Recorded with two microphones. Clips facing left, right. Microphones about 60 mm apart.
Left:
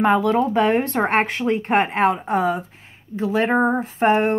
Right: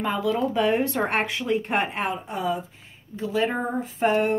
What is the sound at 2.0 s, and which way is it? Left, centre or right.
Speech, left.